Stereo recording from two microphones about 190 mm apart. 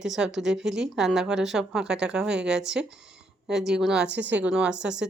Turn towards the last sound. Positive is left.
turn(degrees=-5)  # may be behind; listen again after turning